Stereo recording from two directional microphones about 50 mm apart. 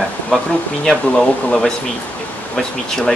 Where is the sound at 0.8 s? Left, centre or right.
Centre.